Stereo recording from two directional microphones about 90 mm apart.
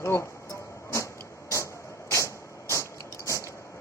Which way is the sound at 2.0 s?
35° left (ahead or behind).